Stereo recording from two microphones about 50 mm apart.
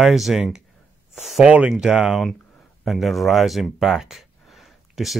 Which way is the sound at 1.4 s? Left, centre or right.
Right.